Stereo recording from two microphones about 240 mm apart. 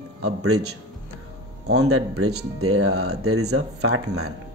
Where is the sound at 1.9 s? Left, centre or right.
Right.